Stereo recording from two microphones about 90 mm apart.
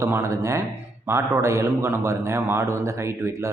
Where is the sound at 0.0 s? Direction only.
35° right (ahead or behind).